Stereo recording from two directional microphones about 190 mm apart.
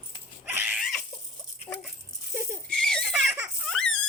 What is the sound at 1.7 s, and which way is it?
Dog, 25° left (ahead or behind).